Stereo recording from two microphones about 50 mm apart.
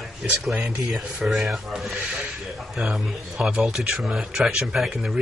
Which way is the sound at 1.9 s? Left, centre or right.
Right.